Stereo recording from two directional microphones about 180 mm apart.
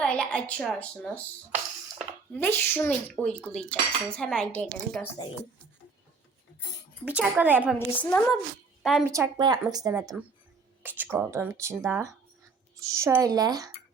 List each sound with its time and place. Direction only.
0.0 s a woman's voice: 5° left (ahead or behind)
7.2 s speech: 10° right (ahead or behind)
7.9 s speech: 15° left (ahead or behind)
8.8 s speech: centre (ahead or behind)
9.0 s speech: 15° right (ahead or behind)